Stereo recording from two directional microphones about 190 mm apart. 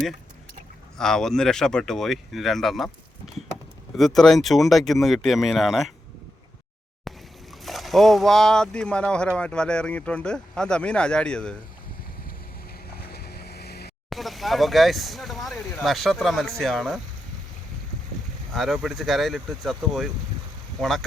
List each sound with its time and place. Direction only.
0.9 s speech: 5° left (ahead or behind)
3.9 s speech: centre (ahead or behind)
7.1 s boat: centre (ahead or behind)
7.6 s speech: centre (ahead or behind)
13.1 s vehicle: 55° left (ahead or behind)
14.1 s speech: centre (ahead or behind)
18.5 s speech: centre (ahead or behind)